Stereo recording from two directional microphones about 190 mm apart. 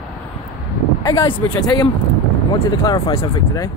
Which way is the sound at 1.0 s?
25° left (ahead or behind).